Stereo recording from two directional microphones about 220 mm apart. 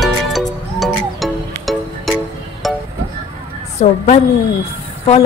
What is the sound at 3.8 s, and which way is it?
Speech, 30° left (ahead or behind).